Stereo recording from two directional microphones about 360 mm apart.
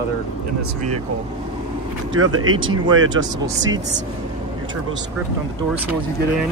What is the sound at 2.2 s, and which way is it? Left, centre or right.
Speech, right.